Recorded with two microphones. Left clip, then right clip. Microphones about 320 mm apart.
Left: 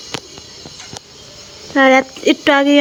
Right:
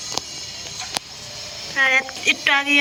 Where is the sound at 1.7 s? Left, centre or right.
Centre.